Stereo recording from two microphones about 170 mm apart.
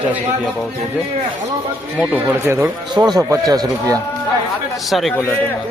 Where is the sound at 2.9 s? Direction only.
25° right (ahead or behind).